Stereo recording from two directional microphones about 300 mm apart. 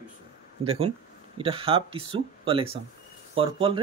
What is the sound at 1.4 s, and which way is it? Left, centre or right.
Speech, centre.